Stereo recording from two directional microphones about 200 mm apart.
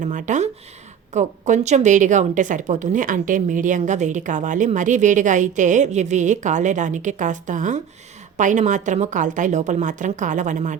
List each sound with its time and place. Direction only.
0.0 s speech: 40° right (ahead or behind)